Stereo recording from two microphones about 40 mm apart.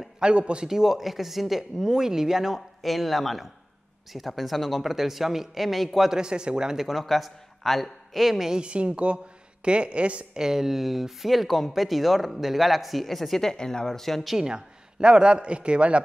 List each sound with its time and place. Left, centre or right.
0.2 s speech: right
0.7 s speech: centre
2.8 s speech: centre
6.1 s speech: centre
6.8 s speech: centre
8.5 s speech: right
10.3 s speech: centre
14.4 s speech: right